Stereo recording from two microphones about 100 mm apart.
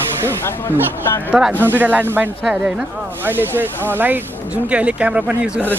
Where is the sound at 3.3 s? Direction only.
20° right (ahead or behind).